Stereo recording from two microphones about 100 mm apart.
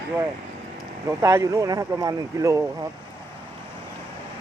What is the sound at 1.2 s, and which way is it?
Speech, 30° right (ahead or behind).